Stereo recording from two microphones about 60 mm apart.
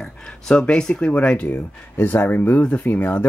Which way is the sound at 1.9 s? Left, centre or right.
Left.